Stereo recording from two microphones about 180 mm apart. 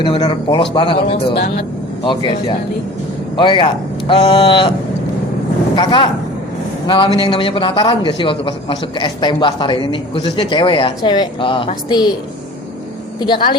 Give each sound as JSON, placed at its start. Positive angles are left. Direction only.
{"t": 0.0, "sound": "a man's voice", "side_deg": 25}
{"t": 3.3, "sound": "a man's voice", "side_deg": 25}
{"t": 5.7, "sound": "a man's voice", "side_deg": 25}
{"t": 13.1, "sound": "a man's voice", "side_deg": 25}